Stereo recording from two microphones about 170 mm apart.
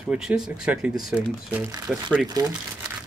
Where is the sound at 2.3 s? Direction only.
20° right (ahead or behind).